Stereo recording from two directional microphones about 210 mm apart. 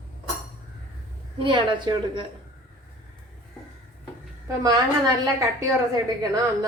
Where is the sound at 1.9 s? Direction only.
20° right (ahead or behind).